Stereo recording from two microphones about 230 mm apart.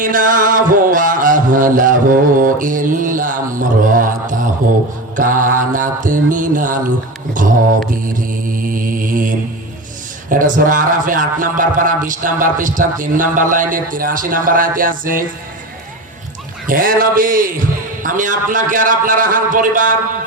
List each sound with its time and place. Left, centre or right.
0.0 s a man's voice: right
8.5 s mantra: right
10.2 s a man's voice: right
16.6 s a man's voice: right